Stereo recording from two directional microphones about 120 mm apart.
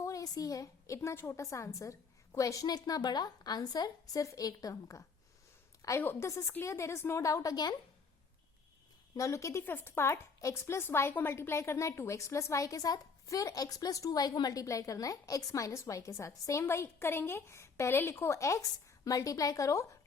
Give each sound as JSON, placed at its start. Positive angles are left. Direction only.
{"t": 0.0, "sound": "a woman's voice", "side_deg": 25}
{"t": 9.1, "sound": "a woman's voice", "side_deg": 25}